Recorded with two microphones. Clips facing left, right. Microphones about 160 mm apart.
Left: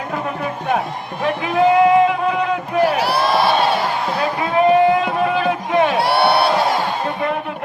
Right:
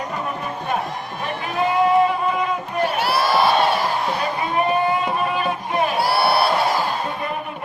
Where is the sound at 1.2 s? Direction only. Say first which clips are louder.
Left 7 dB; 80° left.